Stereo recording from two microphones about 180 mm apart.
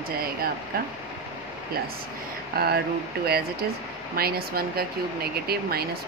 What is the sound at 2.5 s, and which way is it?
Speech, 60° right (ahead or behind).